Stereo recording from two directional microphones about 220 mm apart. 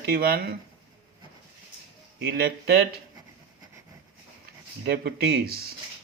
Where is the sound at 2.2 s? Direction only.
45° right (ahead or behind).